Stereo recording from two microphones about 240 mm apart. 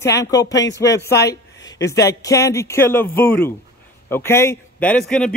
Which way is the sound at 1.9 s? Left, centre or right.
Centre.